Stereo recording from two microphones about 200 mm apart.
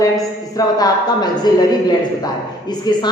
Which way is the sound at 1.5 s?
20° left (ahead or behind).